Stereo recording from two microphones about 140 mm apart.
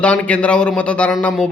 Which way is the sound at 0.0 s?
10° left (ahead or behind).